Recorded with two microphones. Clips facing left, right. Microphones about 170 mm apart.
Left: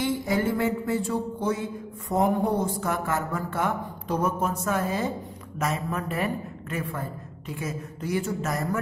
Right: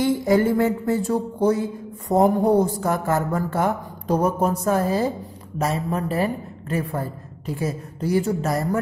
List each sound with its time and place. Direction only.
0.0 s speech: 40° right (ahead or behind)